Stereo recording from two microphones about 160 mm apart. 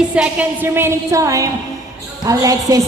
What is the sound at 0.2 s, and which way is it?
A woman's voice, 10° right (ahead or behind).